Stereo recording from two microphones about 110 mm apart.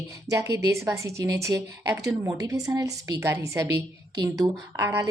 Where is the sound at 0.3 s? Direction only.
30° right (ahead or behind).